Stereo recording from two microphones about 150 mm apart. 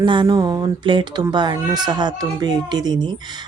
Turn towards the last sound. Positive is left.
turn(degrees=-30)  # may be behind; listen again after turning